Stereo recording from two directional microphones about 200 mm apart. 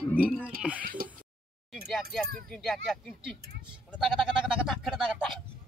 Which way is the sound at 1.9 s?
Centre (ahead or behind).